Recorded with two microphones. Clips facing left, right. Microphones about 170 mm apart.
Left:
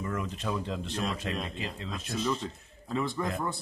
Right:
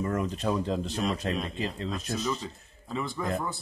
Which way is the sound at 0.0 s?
40° right (ahead or behind).